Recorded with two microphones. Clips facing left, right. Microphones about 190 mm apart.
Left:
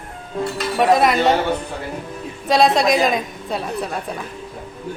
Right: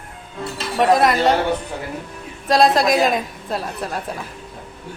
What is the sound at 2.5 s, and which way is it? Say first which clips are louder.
A woman's voice: even; centre (ahead or behind).